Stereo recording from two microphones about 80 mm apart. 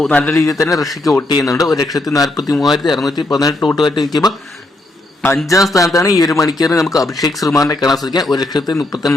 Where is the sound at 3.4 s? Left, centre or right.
Left.